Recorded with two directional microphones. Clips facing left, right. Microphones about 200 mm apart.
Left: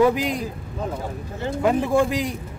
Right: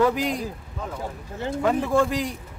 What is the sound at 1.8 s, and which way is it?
Speech, 10° left (ahead or behind).